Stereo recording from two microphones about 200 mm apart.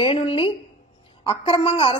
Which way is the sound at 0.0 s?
25° left (ahead or behind).